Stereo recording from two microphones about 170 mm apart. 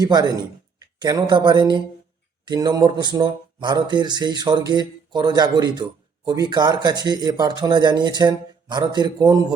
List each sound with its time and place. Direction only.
0.0 s speech: 25° right (ahead or behind)